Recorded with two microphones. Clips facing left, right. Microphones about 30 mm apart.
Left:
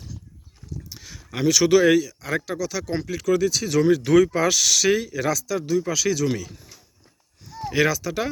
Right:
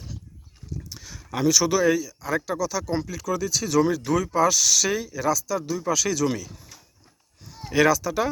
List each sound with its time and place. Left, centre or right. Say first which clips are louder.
0.9 s a sound: right 2 dB; centre
1.5 s speech: left 6 dB; left
2.5 s speech: right 1 dB; left
2.8 s speech: left 3 dB; left
3.6 s speech: left 2 dB; left
4.3 s speech: even; left
4.8 s speech: left 4 dB; left
5.0 s speech: even; left
5.5 s speech: left 5 dB; left
5.8 s speech: left 1 dB; centre
7.7 s speech: right 2 dB; centre
8.0 s speech: right 1 dB; left